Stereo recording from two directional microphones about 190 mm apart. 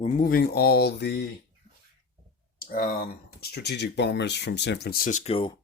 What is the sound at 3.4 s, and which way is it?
Speech, 60° left (ahead or behind).